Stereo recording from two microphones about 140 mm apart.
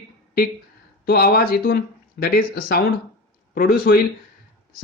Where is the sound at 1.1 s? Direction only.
90° left.